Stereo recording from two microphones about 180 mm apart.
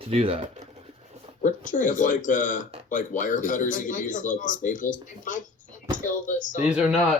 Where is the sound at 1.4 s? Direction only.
45° left (ahead or behind).